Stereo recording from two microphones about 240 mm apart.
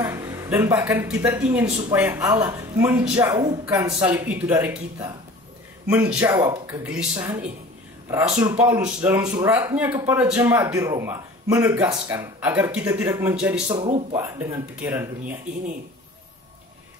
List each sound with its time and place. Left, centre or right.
0.0 s speech: centre
13.7 s speech: right
14.1 s speech: centre